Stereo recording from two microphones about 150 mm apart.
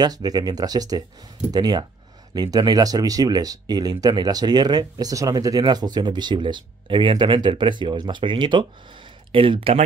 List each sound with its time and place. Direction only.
0.0 s speech: 25° right (ahead or behind)